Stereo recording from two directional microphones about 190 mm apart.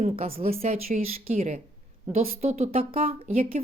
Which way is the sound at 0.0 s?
30° right (ahead or behind).